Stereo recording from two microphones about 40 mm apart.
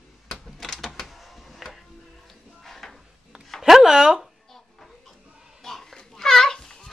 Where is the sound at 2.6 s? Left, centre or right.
Centre.